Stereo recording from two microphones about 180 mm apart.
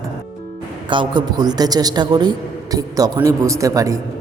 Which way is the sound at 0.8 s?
25° right (ahead or behind).